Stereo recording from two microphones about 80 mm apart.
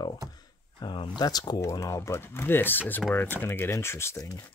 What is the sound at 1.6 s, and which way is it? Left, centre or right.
Speech, left.